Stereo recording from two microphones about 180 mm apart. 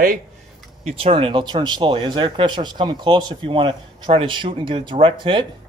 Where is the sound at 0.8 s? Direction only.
30° right (ahead or behind).